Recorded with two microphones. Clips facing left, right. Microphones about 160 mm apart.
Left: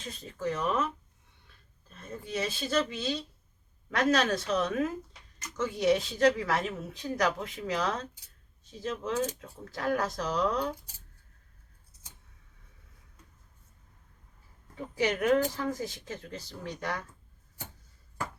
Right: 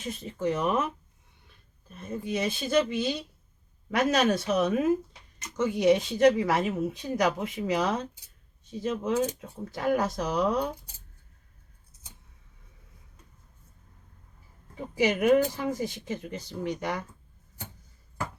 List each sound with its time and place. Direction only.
0.3 s speech: 20° right (ahead or behind)
1.9 s speech: 10° right (ahead or behind)
14.8 s speech: 10° right (ahead or behind)